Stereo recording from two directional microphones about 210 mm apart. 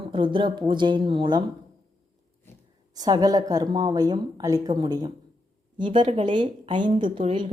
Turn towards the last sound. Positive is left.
turn(degrees=-25)  # may be behind; listen again after turning